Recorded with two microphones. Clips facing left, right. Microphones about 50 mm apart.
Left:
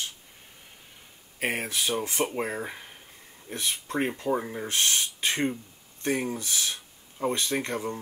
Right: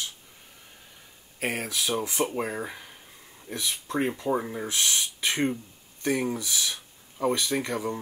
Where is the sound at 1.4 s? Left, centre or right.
Left.